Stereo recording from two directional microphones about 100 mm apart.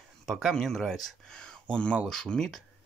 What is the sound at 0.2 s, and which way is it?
Speech, centre (ahead or behind).